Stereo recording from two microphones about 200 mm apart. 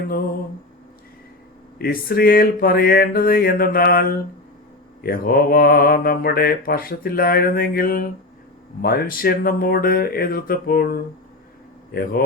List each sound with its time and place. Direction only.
1.8 s speech: 50° left (ahead or behind)